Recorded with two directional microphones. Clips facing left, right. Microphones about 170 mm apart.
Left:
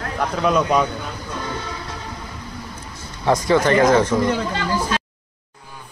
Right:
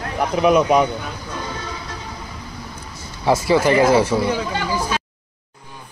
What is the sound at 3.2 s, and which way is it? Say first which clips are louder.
Speech: right 1 dB; 5° right (ahead or behind).